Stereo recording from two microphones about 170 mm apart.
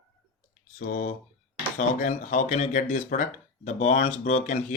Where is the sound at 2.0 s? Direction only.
45° left (ahead or behind).